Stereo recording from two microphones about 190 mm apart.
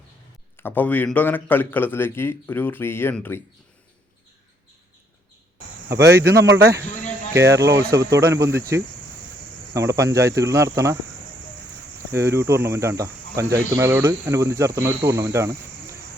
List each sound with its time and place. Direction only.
0.5 s a man's voice: 10° left (ahead or behind)
6.1 s speech: 15° right (ahead or behind)
7.3 s speech: 15° right (ahead or behind)
9.7 s speech: 15° right (ahead or behind)
12.1 s speech: 15° right (ahead or behind)